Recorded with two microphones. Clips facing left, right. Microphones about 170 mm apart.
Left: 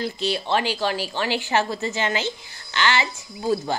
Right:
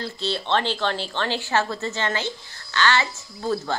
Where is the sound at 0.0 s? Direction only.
15° left (ahead or behind).